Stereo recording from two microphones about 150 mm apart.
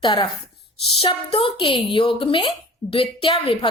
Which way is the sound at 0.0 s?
35° left (ahead or behind).